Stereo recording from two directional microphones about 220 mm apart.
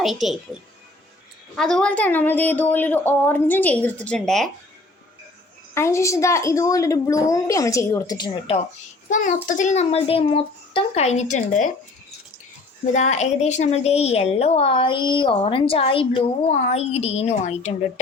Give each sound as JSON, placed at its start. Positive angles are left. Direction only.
{"t": 0.0, "sound": "speech", "side_deg": 0}
{"t": 1.5, "sound": "a woman's voice", "side_deg": 0}
{"t": 5.7, "sound": "a woman's voice", "side_deg": 10}
{"t": 9.0, "sound": "a child's voice", "side_deg": 35}
{"t": 12.8, "sound": "a woman's voice", "side_deg": 35}